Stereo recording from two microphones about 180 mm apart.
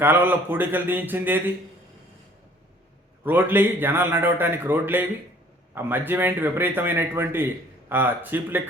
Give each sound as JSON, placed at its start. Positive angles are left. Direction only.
{"t": 0.0, "sound": "a man's voice", "side_deg": -10}
{"t": 3.2, "sound": "a man's voice", "side_deg": -10}